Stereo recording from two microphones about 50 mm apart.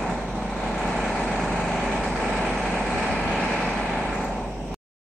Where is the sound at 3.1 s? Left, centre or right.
Centre.